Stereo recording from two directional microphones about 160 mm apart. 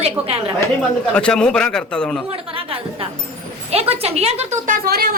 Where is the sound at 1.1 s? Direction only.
5° left (ahead or behind).